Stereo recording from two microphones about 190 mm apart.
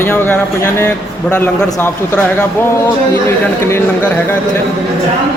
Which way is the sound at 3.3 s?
10° left (ahead or behind).